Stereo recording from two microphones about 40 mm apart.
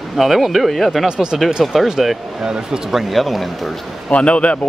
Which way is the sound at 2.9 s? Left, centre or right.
Centre.